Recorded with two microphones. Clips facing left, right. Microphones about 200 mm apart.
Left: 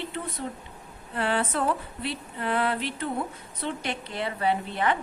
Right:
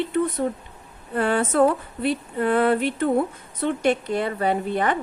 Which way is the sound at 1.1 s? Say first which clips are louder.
Right 6 dB; 45° right (ahead or behind).